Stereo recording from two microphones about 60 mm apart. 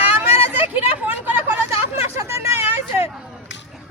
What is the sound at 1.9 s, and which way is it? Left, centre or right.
Hubbub, right.